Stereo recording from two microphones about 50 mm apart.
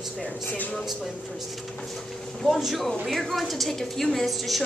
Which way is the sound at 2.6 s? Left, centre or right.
Centre.